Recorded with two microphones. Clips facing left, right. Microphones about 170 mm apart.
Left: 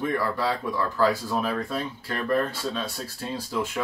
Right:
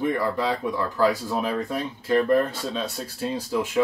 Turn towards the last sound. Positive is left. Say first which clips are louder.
# right 3 dB
turn(degrees=-15)  # may be behind; listen again after turning